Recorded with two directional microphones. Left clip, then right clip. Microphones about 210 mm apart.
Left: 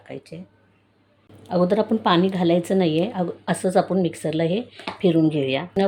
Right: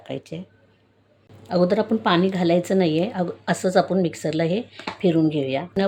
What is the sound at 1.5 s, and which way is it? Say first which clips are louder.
A woman's voice: even; 5° right (ahead or behind).